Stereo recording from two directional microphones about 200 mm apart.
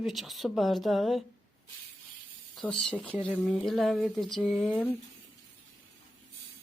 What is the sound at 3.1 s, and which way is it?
Speech, 25° left (ahead or behind).